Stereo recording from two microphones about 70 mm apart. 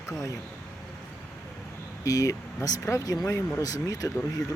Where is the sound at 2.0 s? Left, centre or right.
Left.